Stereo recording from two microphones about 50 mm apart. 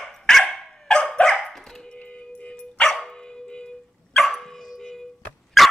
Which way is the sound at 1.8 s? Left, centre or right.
Left.